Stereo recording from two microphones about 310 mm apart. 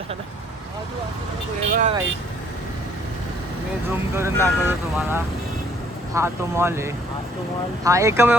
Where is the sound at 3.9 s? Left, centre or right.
Centre.